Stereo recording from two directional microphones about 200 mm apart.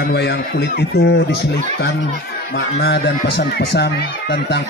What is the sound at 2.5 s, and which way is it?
Speech, 60° left (ahead or behind).